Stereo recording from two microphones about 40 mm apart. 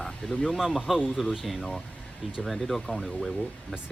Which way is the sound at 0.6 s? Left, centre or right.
Centre.